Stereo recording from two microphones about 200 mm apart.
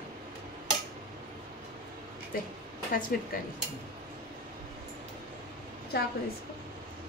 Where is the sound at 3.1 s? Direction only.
45° left (ahead or behind).